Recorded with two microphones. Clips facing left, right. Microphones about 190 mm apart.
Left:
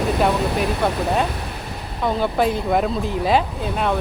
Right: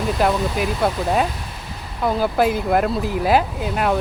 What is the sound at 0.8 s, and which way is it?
Speech, 5° right (ahead or behind).